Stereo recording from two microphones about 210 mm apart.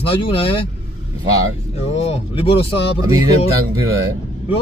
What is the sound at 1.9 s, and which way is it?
Speech, 30° left (ahead or behind).